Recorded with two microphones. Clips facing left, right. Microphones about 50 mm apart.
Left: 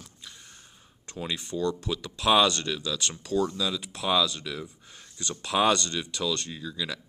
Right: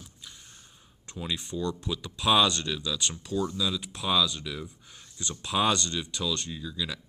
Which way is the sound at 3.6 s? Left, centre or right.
Centre.